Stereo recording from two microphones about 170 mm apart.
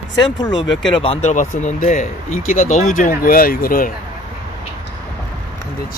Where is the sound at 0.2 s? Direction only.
25° left (ahead or behind).